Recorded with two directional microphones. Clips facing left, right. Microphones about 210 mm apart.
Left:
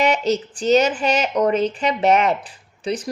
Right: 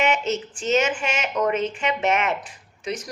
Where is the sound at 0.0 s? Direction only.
35° left (ahead or behind).